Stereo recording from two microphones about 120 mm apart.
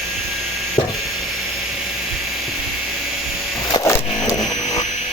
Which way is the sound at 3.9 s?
30° left (ahead or behind).